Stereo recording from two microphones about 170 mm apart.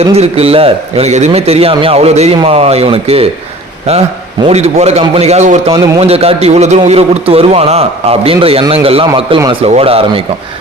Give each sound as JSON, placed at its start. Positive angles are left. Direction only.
{"t": 0.0, "sound": "a man's voice", "side_deg": -35}
{"t": 4.4, "sound": "a man's voice", "side_deg": -40}